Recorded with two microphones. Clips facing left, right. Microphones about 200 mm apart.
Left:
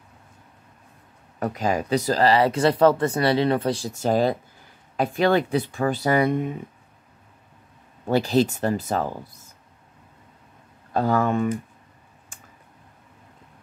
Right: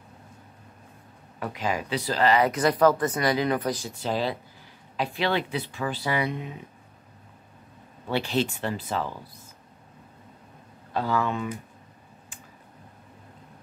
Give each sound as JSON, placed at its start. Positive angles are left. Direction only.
{"t": 1.4, "sound": "speech", "side_deg": 40}
{"t": 3.9, "sound": "speech", "side_deg": 45}
{"t": 8.1, "sound": "speech", "side_deg": 40}
{"t": 10.9, "sound": "speech", "side_deg": 45}